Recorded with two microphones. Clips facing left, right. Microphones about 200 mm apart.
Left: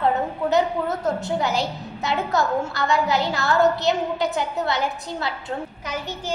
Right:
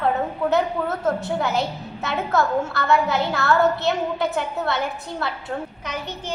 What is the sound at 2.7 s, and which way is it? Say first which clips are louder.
A woman's voice: right 2 dB; 60° right (ahead or behind).